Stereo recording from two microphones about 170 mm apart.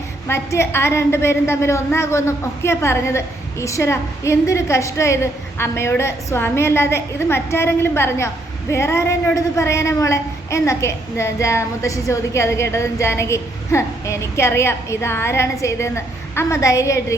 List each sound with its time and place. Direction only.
0.3 s a woman's voice: 15° left (ahead or behind)